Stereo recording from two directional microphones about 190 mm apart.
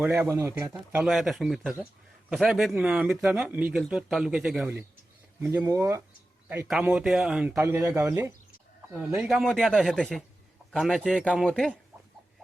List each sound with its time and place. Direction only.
0.0 s speech: 10° right (ahead or behind)
1.0 s speech: centre (ahead or behind)
6.7 s speech: 5° right (ahead or behind)